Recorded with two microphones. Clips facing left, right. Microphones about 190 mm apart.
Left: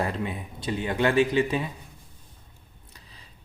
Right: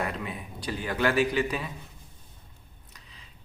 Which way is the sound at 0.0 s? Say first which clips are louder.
Left 4 dB; 30° left (ahead or behind).